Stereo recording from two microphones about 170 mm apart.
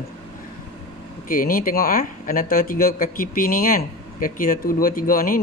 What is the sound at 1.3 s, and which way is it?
Speech, 55° left (ahead or behind).